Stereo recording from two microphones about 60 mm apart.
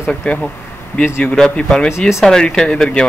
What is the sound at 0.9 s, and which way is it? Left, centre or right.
Speech, left.